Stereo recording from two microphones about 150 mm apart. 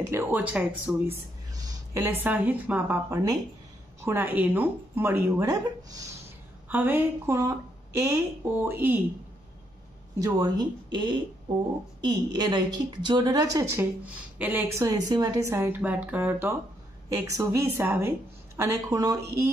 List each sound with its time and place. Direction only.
0.0 s a woman's voice: 15° right (ahead or behind)
1.5 s a sound: 25° right (ahead or behind)
2.0 s a woman's voice: 10° right (ahead or behind)
6.7 s a woman's voice: 10° right (ahead or behind)
10.1 s a woman's voice: 25° right (ahead or behind)